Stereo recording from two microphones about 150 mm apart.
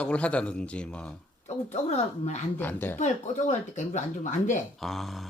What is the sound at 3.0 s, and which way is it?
Speech, 55° left (ahead or behind).